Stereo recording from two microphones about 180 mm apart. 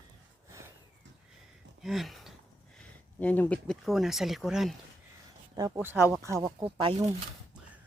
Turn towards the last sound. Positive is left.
turn(degrees=-30)  # may be behind; listen again after turning